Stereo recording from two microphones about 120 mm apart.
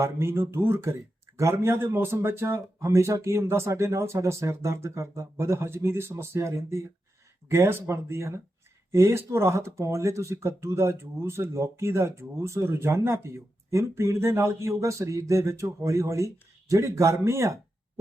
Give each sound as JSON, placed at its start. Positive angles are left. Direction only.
{"t": 0.0, "sound": "speech", "side_deg": -20}